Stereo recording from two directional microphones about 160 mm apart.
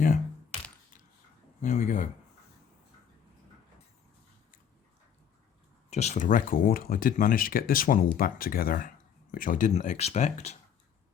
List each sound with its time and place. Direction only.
1.6 s speech: 50° left (ahead or behind)
5.9 s speech: 45° left (ahead or behind)